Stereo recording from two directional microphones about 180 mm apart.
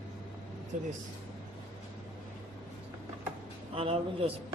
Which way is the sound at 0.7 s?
45° right (ahead or behind).